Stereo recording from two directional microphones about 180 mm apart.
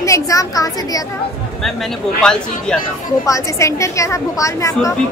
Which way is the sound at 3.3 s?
15° left (ahead or behind).